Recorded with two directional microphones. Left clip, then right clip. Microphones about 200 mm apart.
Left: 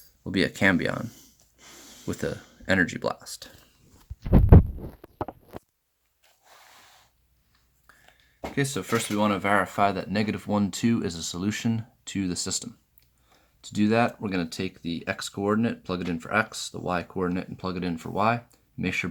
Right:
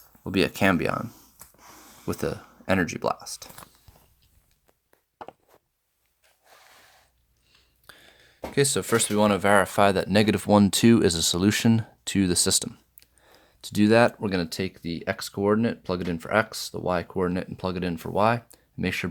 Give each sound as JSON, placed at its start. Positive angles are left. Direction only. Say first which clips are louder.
{"t": 0.3, "sound": "speech", "louder": "right 1 dB", "side_deg": 5}
{"t": 2.3, "sound": "speech", "louder": "left 3 dB", "side_deg": -10}
{"t": 7.9, "sound": "a sound", "louder": "right 7 dB", "side_deg": -40}
{"t": 8.5, "sound": "speech", "louder": "right 5 dB", "side_deg": -50}